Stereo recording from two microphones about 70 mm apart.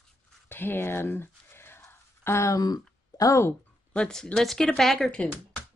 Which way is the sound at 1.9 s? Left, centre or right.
Left.